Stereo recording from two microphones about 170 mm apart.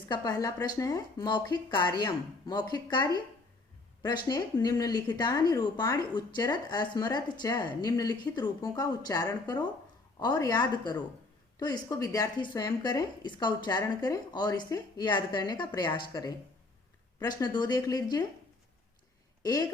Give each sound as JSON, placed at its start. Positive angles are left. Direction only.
{"t": 0.1, "sound": "a woman's voice", "side_deg": 20}
{"t": 19.4, "sound": "speech", "side_deg": 25}